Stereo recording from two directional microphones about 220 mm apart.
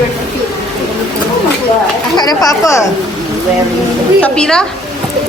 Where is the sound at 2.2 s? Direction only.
15° left (ahead or behind).